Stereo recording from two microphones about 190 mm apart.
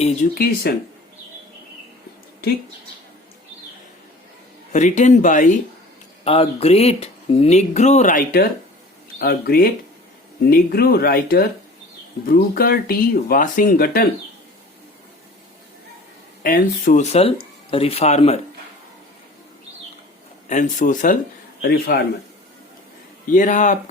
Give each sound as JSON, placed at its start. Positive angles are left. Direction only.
{"t": 0.2, "sound": "speech", "side_deg": 40}
{"t": 0.7, "sound": "speech", "side_deg": 55}
{"t": 4.7, "sound": "speech", "side_deg": 40}
{"t": 6.2, "sound": "speech", "side_deg": 30}
{"t": 16.4, "sound": "speech", "side_deg": 45}
{"t": 20.5, "sound": "speech", "side_deg": 40}
{"t": 23.3, "sound": "speech", "side_deg": 40}